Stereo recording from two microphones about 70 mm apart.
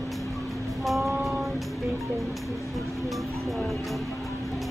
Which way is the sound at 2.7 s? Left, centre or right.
Centre.